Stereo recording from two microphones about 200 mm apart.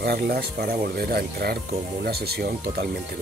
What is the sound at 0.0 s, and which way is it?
Speech, 55° right (ahead or behind).